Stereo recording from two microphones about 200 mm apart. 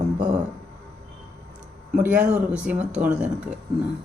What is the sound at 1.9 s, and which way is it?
Speech, 5° right (ahead or behind).